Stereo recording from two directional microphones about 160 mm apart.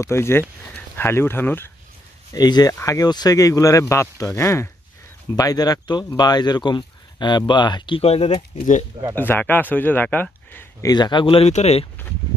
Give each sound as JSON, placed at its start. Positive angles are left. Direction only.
{"t": 0.0, "sound": "speech", "side_deg": 15}
{"t": 2.3, "sound": "speech", "side_deg": 25}
{"t": 9.1, "sound": "speech", "side_deg": 10}
{"t": 10.9, "sound": "speech", "side_deg": 25}